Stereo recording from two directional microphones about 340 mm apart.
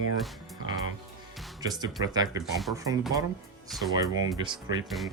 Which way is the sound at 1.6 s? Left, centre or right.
Centre.